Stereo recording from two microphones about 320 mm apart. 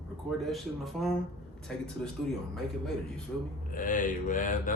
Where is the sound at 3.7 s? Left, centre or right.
Left.